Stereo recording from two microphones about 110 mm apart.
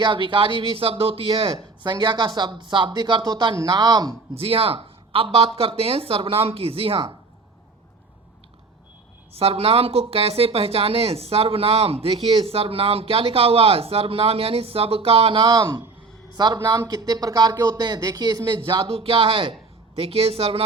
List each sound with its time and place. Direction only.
0.0 s speech: 50° right (ahead or behind)
1.5 s speech: 45° right (ahead or behind)
4.4 s speech: 55° right (ahead or behind)
9.3 s speech: 65° right (ahead or behind)